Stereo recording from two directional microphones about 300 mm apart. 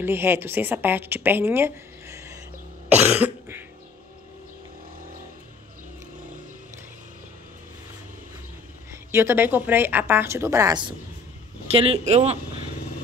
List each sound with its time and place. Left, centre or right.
0.0 s a woman's voice: centre
2.9 s cough: centre
8.9 s a woman's voice: centre